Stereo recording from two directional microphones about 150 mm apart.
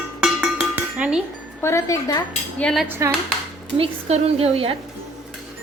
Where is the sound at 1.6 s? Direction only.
20° left (ahead or behind).